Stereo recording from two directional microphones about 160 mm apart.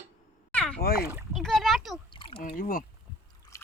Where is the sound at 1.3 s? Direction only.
Centre (ahead or behind).